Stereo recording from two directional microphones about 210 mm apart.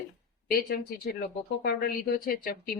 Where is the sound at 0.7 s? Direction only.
45° left (ahead or behind).